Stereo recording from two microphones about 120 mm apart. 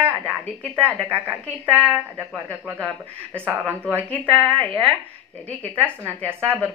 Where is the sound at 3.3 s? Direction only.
15° right (ahead or behind).